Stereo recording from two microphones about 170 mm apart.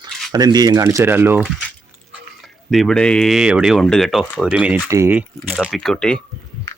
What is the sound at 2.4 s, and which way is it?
Speech, centre (ahead or behind).